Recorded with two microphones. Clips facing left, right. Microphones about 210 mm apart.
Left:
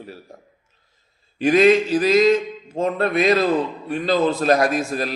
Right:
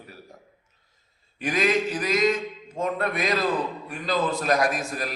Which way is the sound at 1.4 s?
25° left (ahead or behind).